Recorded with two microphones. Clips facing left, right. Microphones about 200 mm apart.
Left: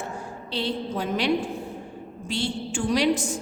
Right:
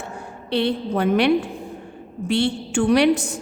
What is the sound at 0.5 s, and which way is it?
A woman's voice, 65° right (ahead or behind).